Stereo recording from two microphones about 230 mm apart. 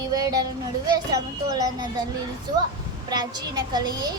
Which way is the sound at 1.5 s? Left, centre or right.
Centre.